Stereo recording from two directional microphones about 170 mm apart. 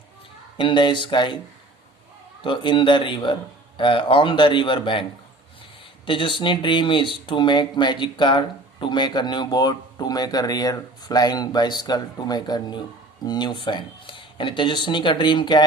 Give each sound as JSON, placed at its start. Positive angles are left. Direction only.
{"t": 0.5, "sound": "speech", "side_deg": 30}
{"t": 2.4, "sound": "speech", "side_deg": 30}
{"t": 6.1, "sound": "speech", "side_deg": 30}